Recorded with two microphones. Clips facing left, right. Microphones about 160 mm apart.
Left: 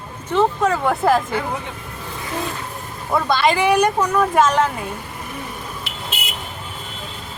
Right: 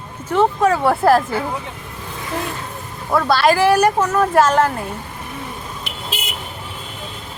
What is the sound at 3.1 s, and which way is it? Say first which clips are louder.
Speech: right 3 dB; 5° right (ahead or behind).